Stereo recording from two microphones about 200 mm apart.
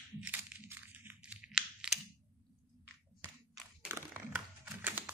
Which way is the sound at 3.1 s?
5° right (ahead or behind).